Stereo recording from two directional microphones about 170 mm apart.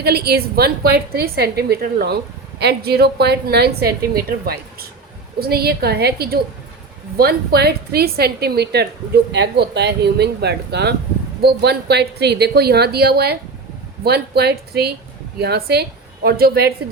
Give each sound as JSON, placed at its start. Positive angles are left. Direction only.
{"t": 0.0, "sound": "a woman's voice", "side_deg": -70}